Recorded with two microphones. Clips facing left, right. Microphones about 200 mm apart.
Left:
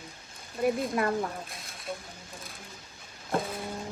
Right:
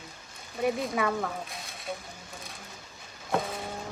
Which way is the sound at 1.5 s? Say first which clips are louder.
Right 1 dB; centre (ahead or behind).